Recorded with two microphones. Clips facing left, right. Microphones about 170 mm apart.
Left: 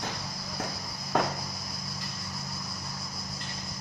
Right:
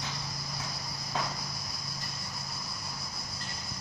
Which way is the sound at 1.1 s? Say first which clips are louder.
Left 8 dB; 60° left (ahead or behind).